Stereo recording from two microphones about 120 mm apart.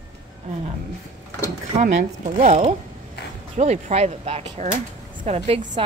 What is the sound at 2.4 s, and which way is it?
Speech, 60° right (ahead or behind).